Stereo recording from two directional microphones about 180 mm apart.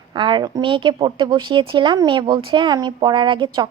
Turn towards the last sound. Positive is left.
turn(degrees=-25)  # may be behind; listen again after turning